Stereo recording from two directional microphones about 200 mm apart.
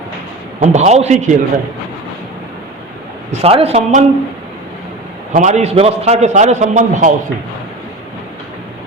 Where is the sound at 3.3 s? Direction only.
30° right (ahead or behind).